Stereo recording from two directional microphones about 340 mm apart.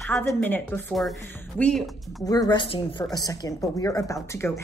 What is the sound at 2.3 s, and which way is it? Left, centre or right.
A woman's voice, centre.